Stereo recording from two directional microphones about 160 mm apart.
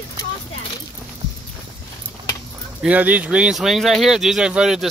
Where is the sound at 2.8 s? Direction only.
10° right (ahead or behind).